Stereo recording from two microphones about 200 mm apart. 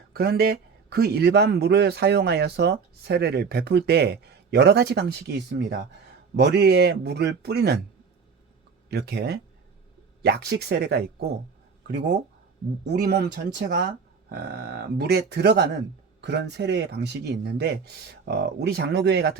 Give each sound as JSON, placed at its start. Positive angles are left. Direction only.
{"t": 0.1, "sound": "speech", "side_deg": -50}
{"t": 8.9, "sound": "speech", "side_deg": -55}